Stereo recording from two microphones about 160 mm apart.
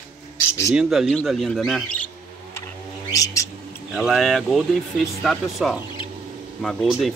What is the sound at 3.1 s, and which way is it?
Music, 20° left (ahead or behind).